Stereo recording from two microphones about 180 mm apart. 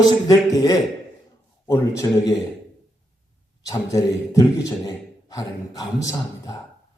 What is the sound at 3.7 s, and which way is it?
A man's voice, 20° left (ahead or behind).